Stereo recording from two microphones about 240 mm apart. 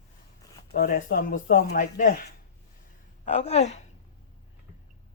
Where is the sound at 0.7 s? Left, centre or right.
Left.